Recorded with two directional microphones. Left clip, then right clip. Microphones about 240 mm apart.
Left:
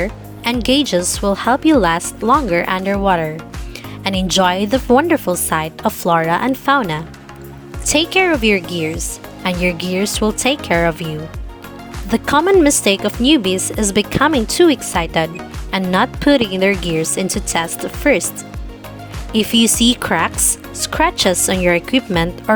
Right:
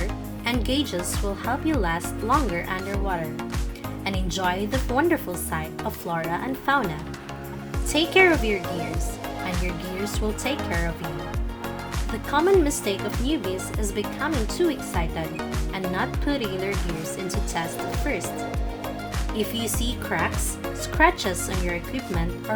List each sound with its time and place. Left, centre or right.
0.6 s speech: left
7.9 s speech: left
12.1 s speech: left
19.4 s speech: left